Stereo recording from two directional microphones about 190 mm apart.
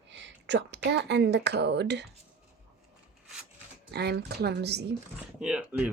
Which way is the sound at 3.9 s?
60° right (ahead or behind).